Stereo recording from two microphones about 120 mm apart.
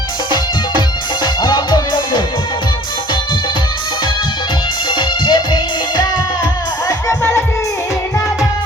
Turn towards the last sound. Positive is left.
turn(degrees=25)  # may be behind; listen again after turning